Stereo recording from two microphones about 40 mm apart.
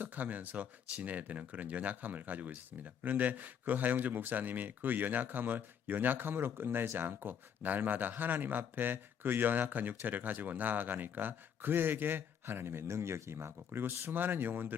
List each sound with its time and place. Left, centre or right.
0.0 s a man's voice: right